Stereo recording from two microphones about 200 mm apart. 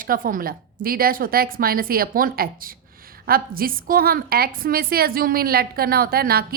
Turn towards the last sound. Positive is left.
turn(degrees=-50)  # may be behind; listen again after turning